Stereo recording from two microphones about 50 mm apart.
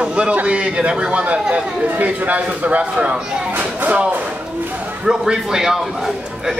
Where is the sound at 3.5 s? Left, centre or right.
Right.